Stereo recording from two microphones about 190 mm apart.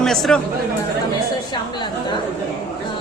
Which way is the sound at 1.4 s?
25° left (ahead or behind).